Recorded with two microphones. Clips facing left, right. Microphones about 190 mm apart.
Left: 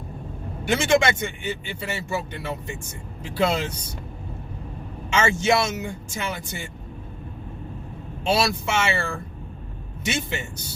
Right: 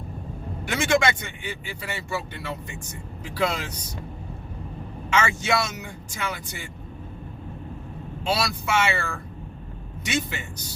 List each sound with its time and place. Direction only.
0.7 s speech: 25° left (ahead or behind)
5.1 s speech: 25° left (ahead or behind)
8.2 s speech: 25° left (ahead or behind)